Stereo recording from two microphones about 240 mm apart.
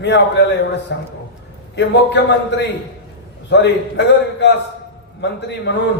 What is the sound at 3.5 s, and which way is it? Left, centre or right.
A man's voice, left.